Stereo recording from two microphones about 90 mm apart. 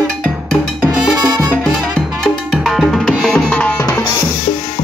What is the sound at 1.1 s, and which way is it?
Music, 50° right (ahead or behind).